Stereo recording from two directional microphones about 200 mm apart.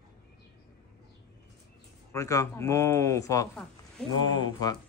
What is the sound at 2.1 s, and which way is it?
Speech, 15° left (ahead or behind).